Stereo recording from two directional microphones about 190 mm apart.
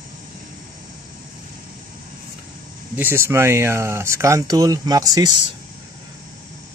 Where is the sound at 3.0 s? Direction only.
10° right (ahead or behind).